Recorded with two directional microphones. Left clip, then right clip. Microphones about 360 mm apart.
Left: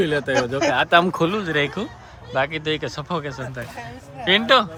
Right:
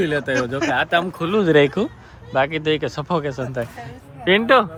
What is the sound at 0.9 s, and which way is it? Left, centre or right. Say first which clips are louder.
Speech: left 4 dB; left.